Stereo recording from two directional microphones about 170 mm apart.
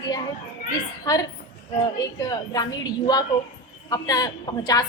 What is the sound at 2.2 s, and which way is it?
A woman's voice, 20° left (ahead or behind).